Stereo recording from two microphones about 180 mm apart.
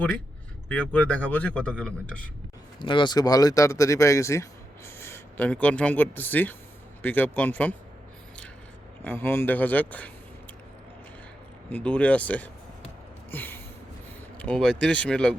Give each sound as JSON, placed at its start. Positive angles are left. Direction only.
{"t": 0.7, "sound": "speech", "side_deg": 5}
{"t": 2.7, "sound": "speech", "side_deg": 25}
{"t": 9.0, "sound": "speech", "side_deg": 10}
{"t": 11.7, "sound": "speech", "side_deg": 5}
{"t": 13.3, "sound": "gasp", "side_deg": 10}
{"t": 14.3, "sound": "speech", "side_deg": 5}